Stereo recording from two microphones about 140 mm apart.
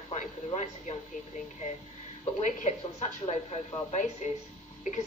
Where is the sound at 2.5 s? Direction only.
55° left (ahead or behind).